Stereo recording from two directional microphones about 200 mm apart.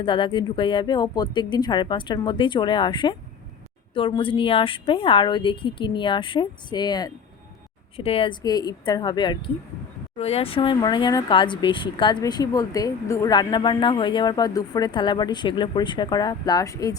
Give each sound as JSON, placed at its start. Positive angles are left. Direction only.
{"t": 0.0, "sound": "speech", "side_deg": 25}